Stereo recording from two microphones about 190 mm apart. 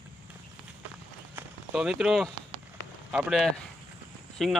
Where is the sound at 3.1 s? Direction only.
5° right (ahead or behind).